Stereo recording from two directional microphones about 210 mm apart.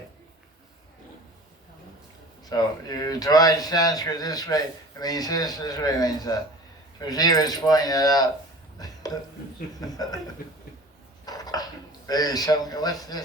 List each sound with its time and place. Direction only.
2.4 s a man's voice: 20° left (ahead or behind)
9.8 s a man's voice: 20° left (ahead or behind)
11.3 s a sound: 20° left (ahead or behind)